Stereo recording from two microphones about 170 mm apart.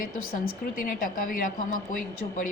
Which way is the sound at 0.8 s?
55° left (ahead or behind).